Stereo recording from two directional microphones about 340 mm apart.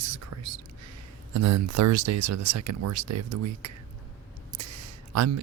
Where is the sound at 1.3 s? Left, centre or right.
Right.